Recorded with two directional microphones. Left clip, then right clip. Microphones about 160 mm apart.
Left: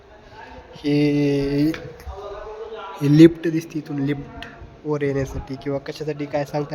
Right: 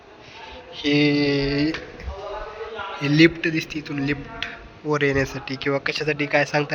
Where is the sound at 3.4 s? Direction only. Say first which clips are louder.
Even; 40° left (ahead or behind).